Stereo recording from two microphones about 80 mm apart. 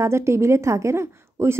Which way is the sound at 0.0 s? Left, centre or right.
Right.